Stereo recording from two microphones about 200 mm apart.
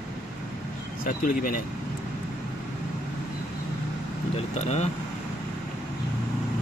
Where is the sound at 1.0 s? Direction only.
45° left (ahead or behind).